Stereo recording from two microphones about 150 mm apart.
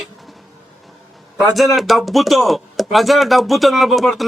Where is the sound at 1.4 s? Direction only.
Centre (ahead or behind).